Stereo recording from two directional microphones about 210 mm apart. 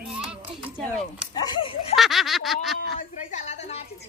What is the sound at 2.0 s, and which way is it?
Speech, centre (ahead or behind).